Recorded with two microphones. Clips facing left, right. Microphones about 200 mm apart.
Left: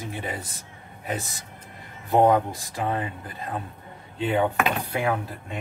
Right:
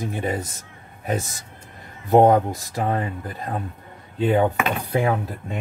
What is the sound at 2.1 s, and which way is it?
Speech, 40° right (ahead or behind).